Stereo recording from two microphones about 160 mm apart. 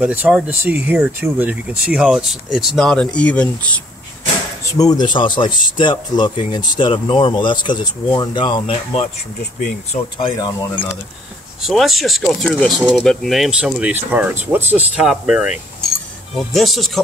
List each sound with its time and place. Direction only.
0.0 s speech: 10° right (ahead or behind); by 3.4 s 5° left (ahead or behind)
4.7 s speech: 25° left (ahead or behind)
9.4 s speech: 65° left (ahead or behind)
10.1 s speech: 25° left (ahead or behind)
11.6 s speech: centre (ahead or behind)